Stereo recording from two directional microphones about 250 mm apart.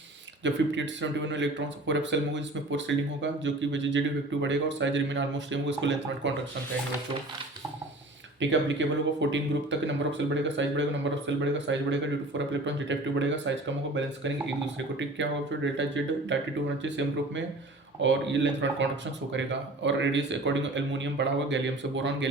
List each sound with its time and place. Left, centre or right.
0.4 s speech: right
8.4 s speech: right